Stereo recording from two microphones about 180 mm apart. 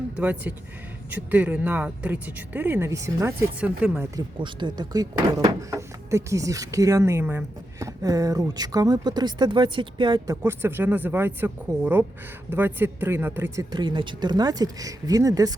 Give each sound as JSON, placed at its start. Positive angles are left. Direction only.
{"t": 0.2, "sound": "speech", "side_deg": -10}
{"t": 4.0, "sound": "speech", "side_deg": -25}